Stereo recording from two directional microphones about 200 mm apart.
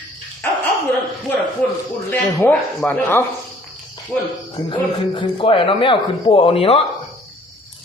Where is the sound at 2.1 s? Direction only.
10° left (ahead or behind).